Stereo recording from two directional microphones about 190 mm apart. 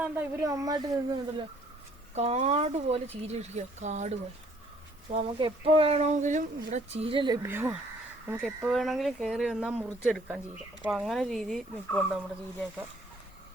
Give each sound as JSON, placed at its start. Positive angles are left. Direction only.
{"t": 0.0, "sound": "speech", "side_deg": -15}
{"t": 2.1, "sound": "speech", "side_deg": -35}
{"t": 5.4, "sound": "speech", "side_deg": -30}
{"t": 7.4, "sound": "speech", "side_deg": -10}